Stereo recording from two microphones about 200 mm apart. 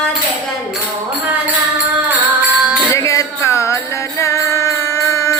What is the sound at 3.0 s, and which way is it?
Music, 15° left (ahead or behind).